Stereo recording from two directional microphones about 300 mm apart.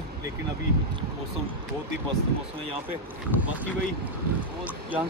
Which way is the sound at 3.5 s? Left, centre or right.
Centre.